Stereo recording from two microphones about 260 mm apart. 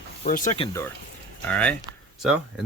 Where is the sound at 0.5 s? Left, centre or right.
Centre.